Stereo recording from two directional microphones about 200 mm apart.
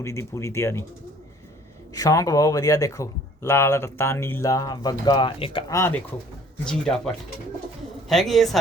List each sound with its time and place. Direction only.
0.0 s speech: 15° left (ahead or behind)
1.9 s speech: 15° left (ahead or behind)
6.7 s speech: centre (ahead or behind)